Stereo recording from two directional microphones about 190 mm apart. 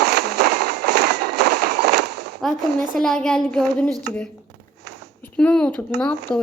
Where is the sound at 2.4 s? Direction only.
Centre (ahead or behind).